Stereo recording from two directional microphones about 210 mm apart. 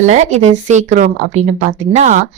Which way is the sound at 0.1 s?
35° right (ahead or behind).